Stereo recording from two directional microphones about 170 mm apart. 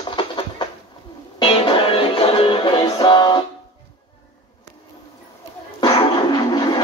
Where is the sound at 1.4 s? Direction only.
30° left (ahead or behind).